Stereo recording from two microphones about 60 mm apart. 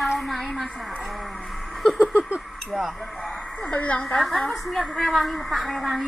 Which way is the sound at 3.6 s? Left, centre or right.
Left.